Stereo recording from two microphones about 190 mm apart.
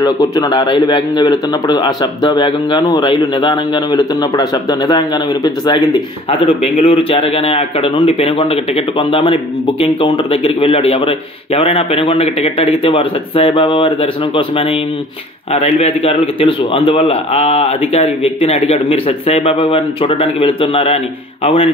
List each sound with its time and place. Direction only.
0.0 s a man's voice: 20° left (ahead or behind)